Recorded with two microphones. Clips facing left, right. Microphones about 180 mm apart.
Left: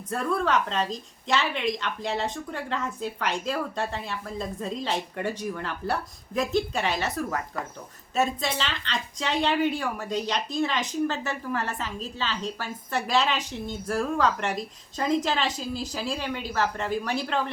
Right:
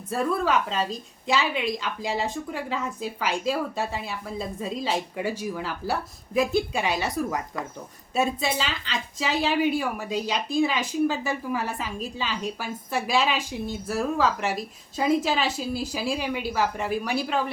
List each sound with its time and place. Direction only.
0.1 s a woman's voice: 5° right (ahead or behind)